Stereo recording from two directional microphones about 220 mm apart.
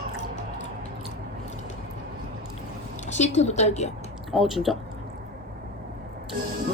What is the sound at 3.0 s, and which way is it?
Speech, 30° left (ahead or behind).